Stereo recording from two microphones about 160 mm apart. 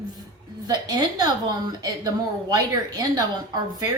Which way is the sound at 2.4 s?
25° right (ahead or behind).